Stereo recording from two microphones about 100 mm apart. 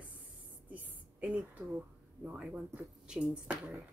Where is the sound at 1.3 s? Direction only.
10° right (ahead or behind).